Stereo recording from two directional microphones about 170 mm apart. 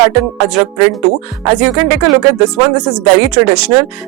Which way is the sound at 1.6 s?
10° right (ahead or behind).